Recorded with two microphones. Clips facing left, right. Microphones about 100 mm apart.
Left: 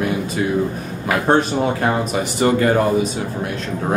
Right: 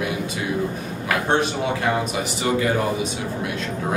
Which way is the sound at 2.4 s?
50° left (ahead or behind).